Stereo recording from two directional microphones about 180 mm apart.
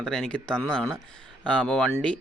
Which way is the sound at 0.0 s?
5° left (ahead or behind).